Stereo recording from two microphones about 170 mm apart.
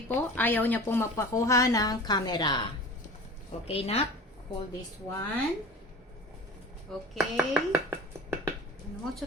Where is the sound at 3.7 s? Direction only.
35° left (ahead or behind).